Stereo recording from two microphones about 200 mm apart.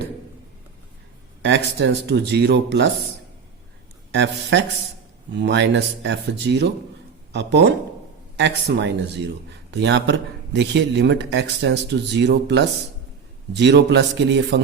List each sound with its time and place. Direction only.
1.5 s speech: 60° right (ahead or behind)
4.1 s speech: 60° right (ahead or behind)